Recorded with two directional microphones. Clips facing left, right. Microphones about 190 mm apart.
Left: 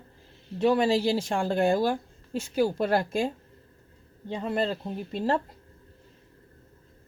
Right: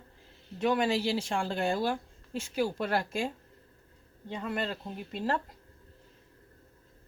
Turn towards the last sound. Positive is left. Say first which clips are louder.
# left 5 dB
turn(degrees=35)  # may be behind; listen again after turning